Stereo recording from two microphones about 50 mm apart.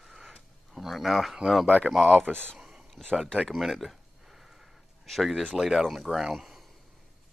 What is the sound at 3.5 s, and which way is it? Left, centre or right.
Speech, centre.